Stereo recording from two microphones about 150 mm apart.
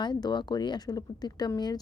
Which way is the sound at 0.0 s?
30° left (ahead or behind).